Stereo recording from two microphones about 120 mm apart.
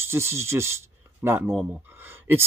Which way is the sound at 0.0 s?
20° right (ahead or behind).